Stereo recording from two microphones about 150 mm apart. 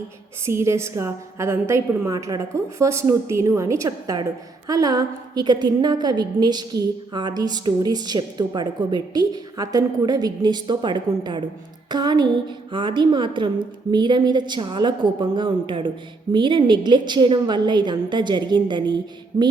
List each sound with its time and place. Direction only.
0.4 s a woman's voice: 20° right (ahead or behind)